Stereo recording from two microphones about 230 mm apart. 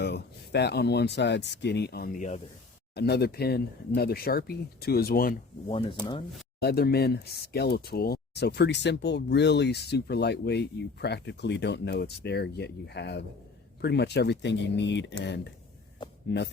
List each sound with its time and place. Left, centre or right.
0.0 s speech: left
2.9 s speech: left
6.6 s speech: left